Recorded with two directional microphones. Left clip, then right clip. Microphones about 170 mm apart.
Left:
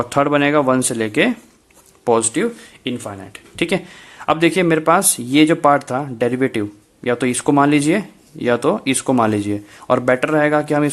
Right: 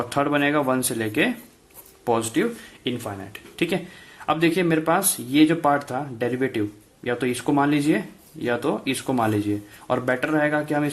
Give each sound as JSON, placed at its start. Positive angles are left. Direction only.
{"t": 0.0, "sound": "speech", "side_deg": 40}